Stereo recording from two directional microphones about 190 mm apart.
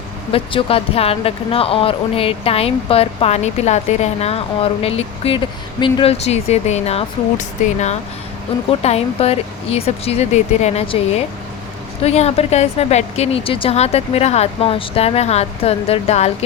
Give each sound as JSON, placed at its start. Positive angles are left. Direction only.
{"t": 0.3, "sound": "speech", "side_deg": 30}